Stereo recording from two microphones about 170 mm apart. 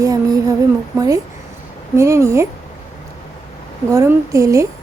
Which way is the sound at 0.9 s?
20° right (ahead or behind).